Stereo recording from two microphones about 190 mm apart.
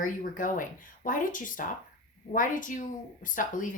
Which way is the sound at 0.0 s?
45° left (ahead or behind).